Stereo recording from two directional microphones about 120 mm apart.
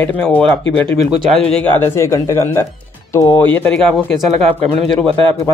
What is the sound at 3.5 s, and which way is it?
Speech, 15° left (ahead or behind).